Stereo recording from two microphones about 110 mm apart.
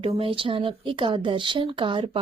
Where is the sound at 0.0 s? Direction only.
55° right (ahead or behind).